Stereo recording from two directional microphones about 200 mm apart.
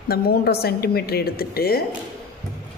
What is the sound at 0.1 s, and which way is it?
A woman's voice, 50° left (ahead or behind).